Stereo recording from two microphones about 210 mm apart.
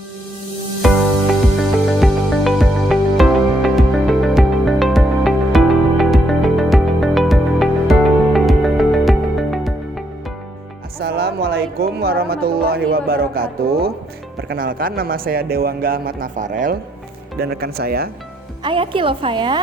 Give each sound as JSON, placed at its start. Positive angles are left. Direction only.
{"t": 0.8, "sound": "music", "side_deg": 0}
{"t": 11.0, "sound": "music", "side_deg": -50}
{"t": 14.5, "sound": "speech", "side_deg": -45}
{"t": 17.4, "sound": "speech", "side_deg": -50}
{"t": 18.6, "sound": "a woman's voice", "side_deg": -25}